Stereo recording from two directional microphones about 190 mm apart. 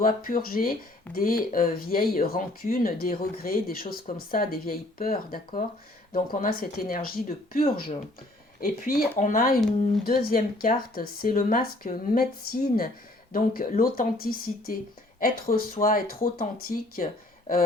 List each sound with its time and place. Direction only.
0.0 s speech: 50° left (ahead or behind)